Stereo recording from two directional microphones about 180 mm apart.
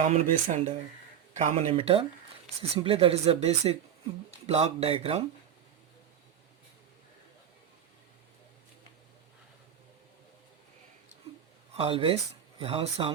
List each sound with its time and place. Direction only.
0.0 s speech: 40° right (ahead or behind)
11.7 s speech: 30° right (ahead or behind)